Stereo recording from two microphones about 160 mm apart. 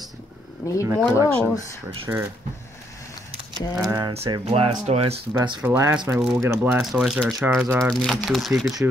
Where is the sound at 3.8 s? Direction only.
25° right (ahead or behind).